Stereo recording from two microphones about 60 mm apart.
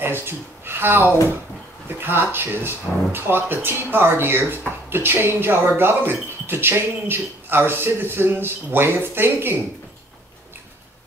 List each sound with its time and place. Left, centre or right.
0.0 s speech: right